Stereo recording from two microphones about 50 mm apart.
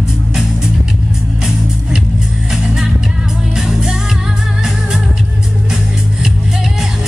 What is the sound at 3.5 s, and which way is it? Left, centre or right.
Music, centre.